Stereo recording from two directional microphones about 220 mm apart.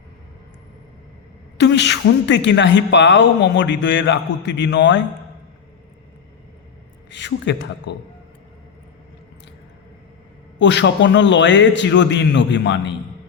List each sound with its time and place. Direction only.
1.5 s a woman's voice: 55° left (ahead or behind)
7.1 s speech: 55° left (ahead or behind)
10.6 s a man's voice: 55° left (ahead or behind)